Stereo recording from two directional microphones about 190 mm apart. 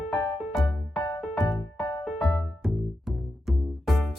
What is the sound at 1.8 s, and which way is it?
Music, 20° left (ahead or behind).